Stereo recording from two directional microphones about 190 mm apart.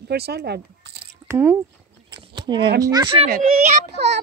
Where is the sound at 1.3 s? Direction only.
10° right (ahead or behind).